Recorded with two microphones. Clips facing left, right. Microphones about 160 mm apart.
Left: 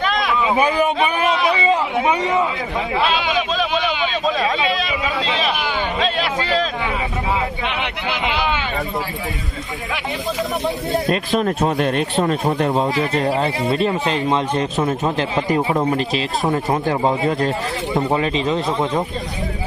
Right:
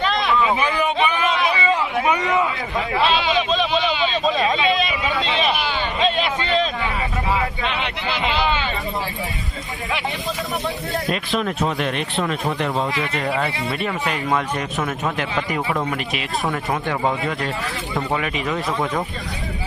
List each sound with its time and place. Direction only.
1.5 s a sound: 20° left (ahead or behind)
2.9 s speech: 5° left (ahead or behind)
4.3 s a sound: centre (ahead or behind)
6.0 s speech: centre (ahead or behind)
7.6 s speech: 15° left (ahead or behind)
11.1 s speech: 40° left (ahead or behind)
13.2 s a man's voice: 30° left (ahead or behind)